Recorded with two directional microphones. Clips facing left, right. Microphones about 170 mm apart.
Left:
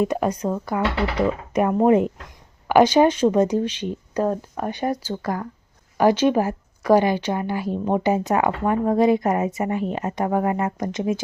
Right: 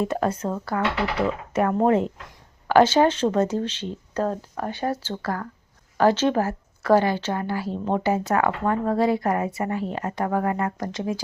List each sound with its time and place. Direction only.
0.0 s a woman's voice: 15° left (ahead or behind)